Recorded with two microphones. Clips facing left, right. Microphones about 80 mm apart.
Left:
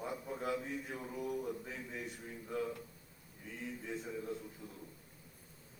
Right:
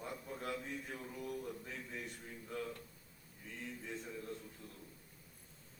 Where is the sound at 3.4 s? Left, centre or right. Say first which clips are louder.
Left 3 dB; centre.